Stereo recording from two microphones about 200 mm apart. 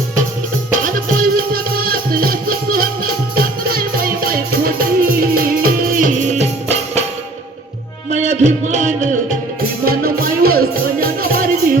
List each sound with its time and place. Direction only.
0.7 s music: 45° right (ahead or behind)
8.1 s music: 35° right (ahead or behind)